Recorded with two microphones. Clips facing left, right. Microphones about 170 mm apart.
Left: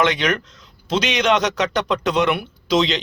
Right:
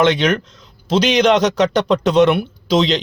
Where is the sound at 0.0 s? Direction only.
30° right (ahead or behind).